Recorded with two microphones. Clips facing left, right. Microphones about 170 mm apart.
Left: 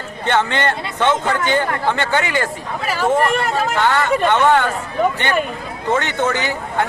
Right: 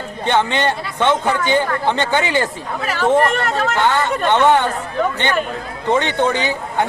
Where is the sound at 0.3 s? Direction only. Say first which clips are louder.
Right 1 dB; 15° right (ahead or behind).